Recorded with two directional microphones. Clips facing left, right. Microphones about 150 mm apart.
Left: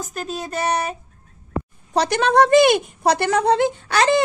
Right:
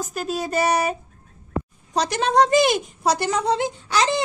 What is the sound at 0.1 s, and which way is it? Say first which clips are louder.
Speech: right 5 dB; 5° right (ahead or behind).